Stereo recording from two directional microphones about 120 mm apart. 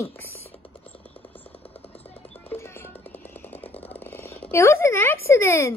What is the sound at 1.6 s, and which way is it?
Music, 55° left (ahead or behind).